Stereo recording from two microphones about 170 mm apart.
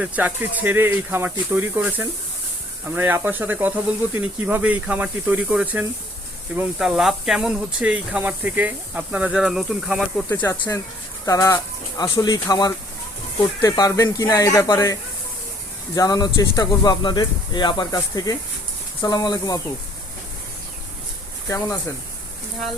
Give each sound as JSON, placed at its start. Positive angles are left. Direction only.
{"t": 0.0, "sound": "speech", "side_deg": -10}
{"t": 10.2, "sound": "speech", "side_deg": 15}
{"t": 16.0, "sound": "speech", "side_deg": 25}
{"t": 21.4, "sound": "speech", "side_deg": 15}